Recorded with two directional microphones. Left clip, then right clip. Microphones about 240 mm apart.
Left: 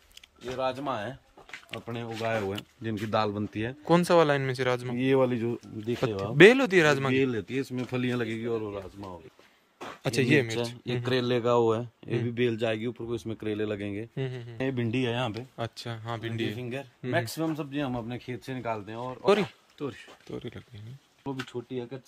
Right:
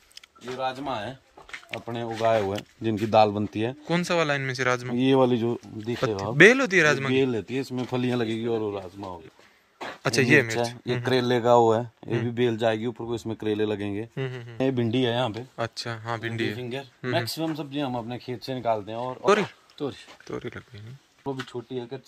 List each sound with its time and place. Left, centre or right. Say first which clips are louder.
1.9 s speech: right 5 dB; centre
2.8 s speech: right 9 dB; right
3.8 s speech: left 4 dB; centre
4.9 s speech: right 4 dB; right
5.9 s speech: right 2 dB; centre
7.2 s speech: right 3 dB; centre; by 9.1 s right
9.8 s speech: right 5 dB; centre
11.1 s speech: right 5 dB; right
14.1 s speech: right 3 dB; centre
14.6 s speech: right 5 dB; right
15.5 s speech: right 5 dB; centre
16.5 s speech: right 3 dB; centre; by 19.1 s right
19.2 s speech: right 2 dB; centre
21.3 s speech: right 3 dB; centre